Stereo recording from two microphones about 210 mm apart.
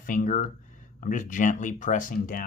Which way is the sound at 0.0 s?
40° left (ahead or behind).